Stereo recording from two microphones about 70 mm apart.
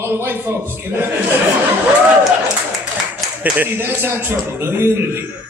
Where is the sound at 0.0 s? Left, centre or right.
Right.